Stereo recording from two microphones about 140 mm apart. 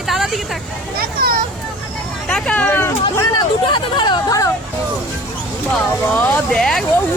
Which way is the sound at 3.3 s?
30° left (ahead or behind).